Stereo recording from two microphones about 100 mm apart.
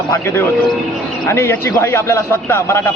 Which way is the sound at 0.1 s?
25° left (ahead or behind).